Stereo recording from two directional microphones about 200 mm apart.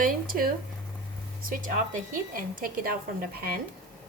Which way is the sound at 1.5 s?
40° right (ahead or behind).